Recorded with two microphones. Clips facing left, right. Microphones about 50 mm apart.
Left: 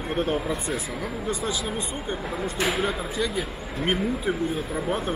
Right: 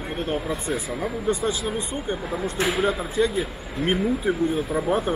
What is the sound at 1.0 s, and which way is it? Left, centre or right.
Speech, right.